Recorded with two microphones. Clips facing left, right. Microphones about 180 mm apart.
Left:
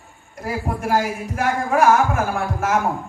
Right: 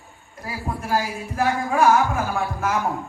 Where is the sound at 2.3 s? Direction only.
50° left (ahead or behind).